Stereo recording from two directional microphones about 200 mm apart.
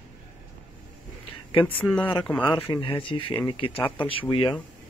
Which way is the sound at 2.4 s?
25° left (ahead or behind).